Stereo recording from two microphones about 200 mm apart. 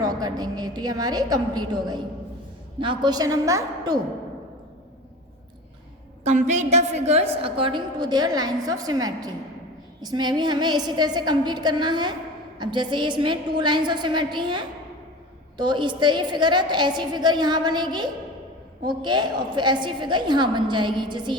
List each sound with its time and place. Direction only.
0.0 s a woman's voice: 20° right (ahead or behind)
6.2 s a woman's voice: 35° right (ahead or behind)